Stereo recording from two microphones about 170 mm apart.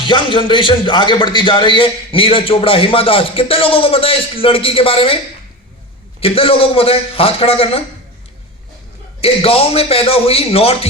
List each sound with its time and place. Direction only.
0.0 s speech: 30° left (ahead or behind)
9.2 s speech: 35° left (ahead or behind)